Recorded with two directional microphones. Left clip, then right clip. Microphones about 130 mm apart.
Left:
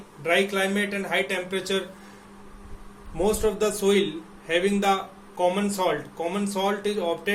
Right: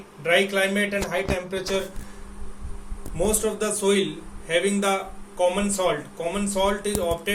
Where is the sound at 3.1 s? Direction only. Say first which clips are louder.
Left 1 dB; 90° left.